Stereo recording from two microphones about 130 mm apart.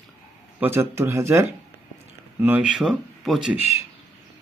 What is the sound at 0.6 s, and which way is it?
Speech, 20° right (ahead or behind).